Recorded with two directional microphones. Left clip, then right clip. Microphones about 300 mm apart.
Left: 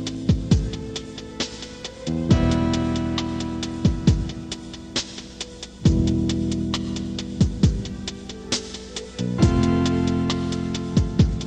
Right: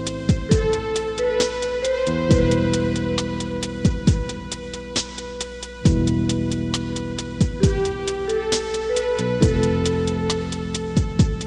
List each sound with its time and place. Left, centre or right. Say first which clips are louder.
0.3 s music: right 8 dB; right
5.9 s music: right 1 dB; right